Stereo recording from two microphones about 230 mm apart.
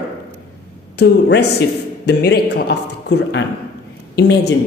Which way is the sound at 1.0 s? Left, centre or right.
Left.